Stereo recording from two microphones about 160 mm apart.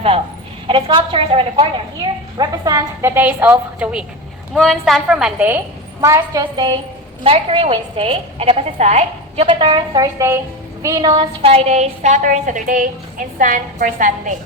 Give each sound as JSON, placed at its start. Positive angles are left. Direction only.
{"t": 0.7, "sound": "a woman's voice", "side_deg": -30}
{"t": 4.5, "sound": "a woman's voice", "side_deg": 0}